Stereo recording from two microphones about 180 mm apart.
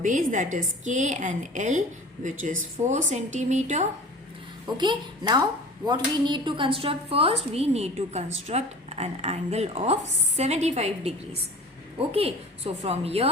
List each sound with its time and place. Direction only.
0.0 s a woman's voice: 45° right (ahead or behind)
4.6 s a woman's voice: 25° right (ahead or behind)